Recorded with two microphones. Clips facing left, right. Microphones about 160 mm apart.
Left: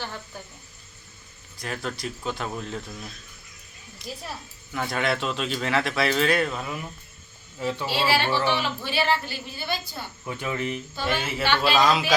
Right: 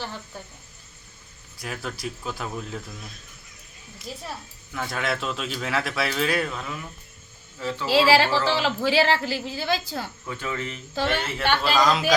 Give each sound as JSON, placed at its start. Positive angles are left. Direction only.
{"t": 1.5, "sound": "speech", "side_deg": -5}
{"t": 7.6, "sound": "speech", "side_deg": 15}
{"t": 7.9, "sound": "a woman's voice", "side_deg": -90}
{"t": 10.2, "sound": "speech", "side_deg": 15}
{"t": 10.9, "sound": "speech", "side_deg": -80}
{"t": 11.2, "sound": "speech", "side_deg": 5}